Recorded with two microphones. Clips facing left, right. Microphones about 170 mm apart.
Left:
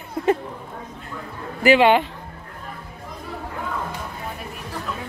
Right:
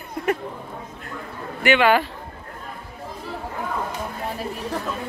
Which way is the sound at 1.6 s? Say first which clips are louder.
Left 3 dB; 30° left (ahead or behind).